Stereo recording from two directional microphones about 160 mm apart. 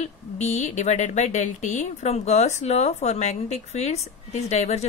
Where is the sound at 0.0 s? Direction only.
45° left (ahead or behind).